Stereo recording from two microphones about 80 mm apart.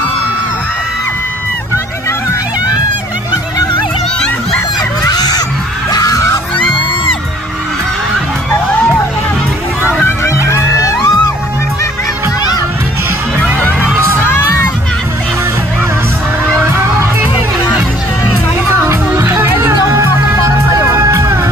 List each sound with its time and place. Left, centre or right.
5.0 s honk: left
5.9 s crowd: left
10.0 s music: left
13.6 s music: left
18.7 s music: right
20.9 s music: right